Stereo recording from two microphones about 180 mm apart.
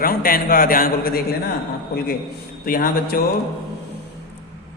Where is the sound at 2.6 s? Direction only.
55° left (ahead or behind).